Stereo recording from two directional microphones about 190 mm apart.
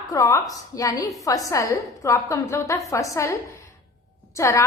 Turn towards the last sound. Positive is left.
turn(degrees=15)  # may be behind; listen again after turning